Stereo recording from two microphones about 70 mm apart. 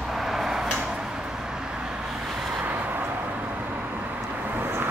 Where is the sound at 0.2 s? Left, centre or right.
Centre.